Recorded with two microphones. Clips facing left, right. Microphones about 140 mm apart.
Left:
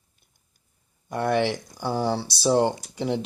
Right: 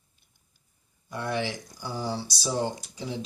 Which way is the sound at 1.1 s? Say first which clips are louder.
Left 7 dB; 60° left (ahead or behind).